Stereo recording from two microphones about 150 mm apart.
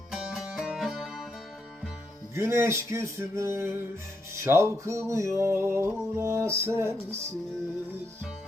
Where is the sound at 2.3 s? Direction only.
20° right (ahead or behind).